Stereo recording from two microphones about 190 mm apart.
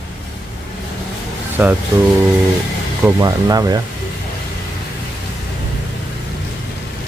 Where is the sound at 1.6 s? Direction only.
10° right (ahead or behind).